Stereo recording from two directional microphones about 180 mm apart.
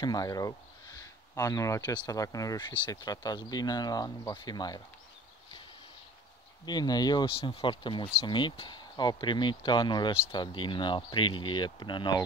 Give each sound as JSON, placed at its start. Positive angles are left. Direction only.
{"t": 0.0, "sound": "speech", "side_deg": 20}
{"t": 6.6, "sound": "speech", "side_deg": 25}